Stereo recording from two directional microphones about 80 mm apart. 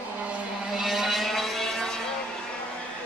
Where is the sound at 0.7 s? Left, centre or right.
Centre.